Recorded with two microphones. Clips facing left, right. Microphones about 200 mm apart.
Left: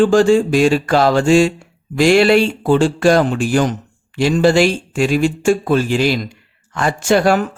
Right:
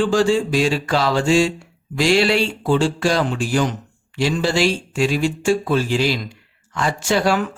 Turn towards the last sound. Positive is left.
turn(degrees=50)  # may be behind; listen again after turning